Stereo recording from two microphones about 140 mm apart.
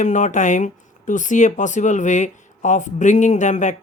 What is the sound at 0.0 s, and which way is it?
Speech, 60° left (ahead or behind).